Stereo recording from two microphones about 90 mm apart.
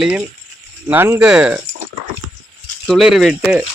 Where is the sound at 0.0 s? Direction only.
15° right (ahead or behind).